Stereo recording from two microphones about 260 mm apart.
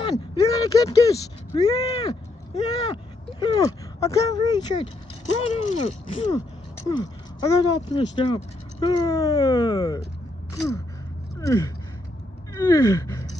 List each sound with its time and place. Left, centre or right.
0.0 s speech: centre
11.3 s speech: centre
12.5 s gasp: centre